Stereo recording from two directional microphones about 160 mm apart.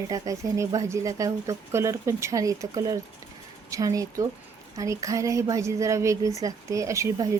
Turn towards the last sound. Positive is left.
turn(degrees=-20)  # may be behind; listen again after turning